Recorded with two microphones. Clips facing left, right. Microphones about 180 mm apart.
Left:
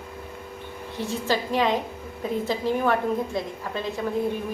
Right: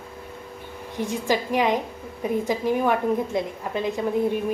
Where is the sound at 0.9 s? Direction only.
15° right (ahead or behind).